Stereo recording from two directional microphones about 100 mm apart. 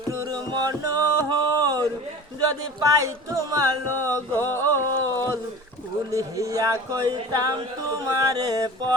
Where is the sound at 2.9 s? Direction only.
35° right (ahead or behind).